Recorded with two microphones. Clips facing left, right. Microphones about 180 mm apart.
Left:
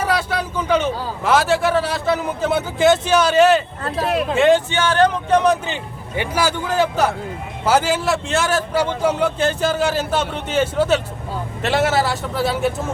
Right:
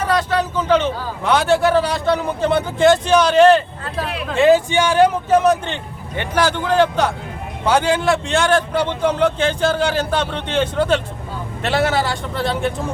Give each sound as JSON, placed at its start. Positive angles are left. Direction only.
{"t": 0.0, "sound": "a man's voice", "side_deg": 10}
{"t": 4.0, "sound": "speech", "side_deg": 45}
{"t": 4.4, "sound": "a man's voice", "side_deg": 0}
{"t": 4.7, "sound": "a man's voice", "side_deg": -10}